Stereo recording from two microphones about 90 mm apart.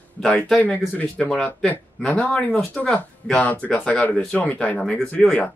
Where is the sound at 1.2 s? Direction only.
5° left (ahead or behind).